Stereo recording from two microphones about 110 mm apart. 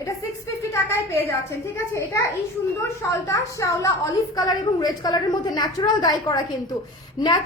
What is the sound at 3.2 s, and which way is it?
A woman's voice, 30° left (ahead or behind).